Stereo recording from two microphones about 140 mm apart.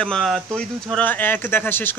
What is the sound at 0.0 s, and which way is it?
Speech, centre (ahead or behind).